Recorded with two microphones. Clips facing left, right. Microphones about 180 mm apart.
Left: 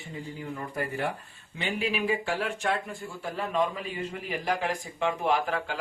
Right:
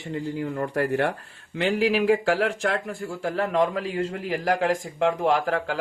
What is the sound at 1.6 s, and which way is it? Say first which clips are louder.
Speech: right 8 dB; 90° right.